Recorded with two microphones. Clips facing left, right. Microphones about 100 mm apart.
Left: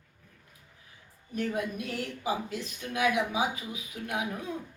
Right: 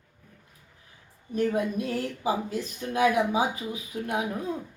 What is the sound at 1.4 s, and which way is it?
Speech, 35° right (ahead or behind).